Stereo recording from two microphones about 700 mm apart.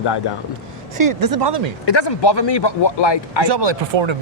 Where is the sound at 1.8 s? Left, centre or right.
Left.